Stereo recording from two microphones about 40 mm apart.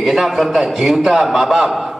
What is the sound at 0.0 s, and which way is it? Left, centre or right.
A man's voice, centre.